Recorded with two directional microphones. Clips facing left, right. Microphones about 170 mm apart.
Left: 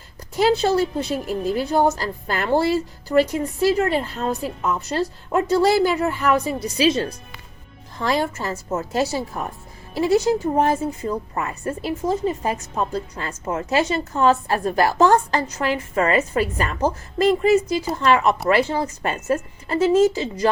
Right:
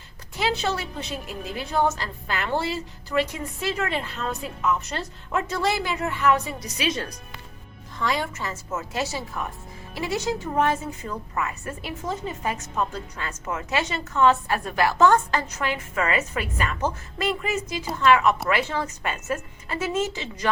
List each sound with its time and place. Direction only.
0.3 s speech: 40° left (ahead or behind)